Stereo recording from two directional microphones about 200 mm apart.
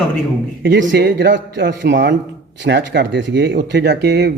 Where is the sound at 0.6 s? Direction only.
60° right (ahead or behind).